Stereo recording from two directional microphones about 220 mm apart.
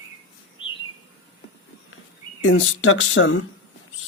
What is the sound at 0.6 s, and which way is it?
Bird, 25° left (ahead or behind).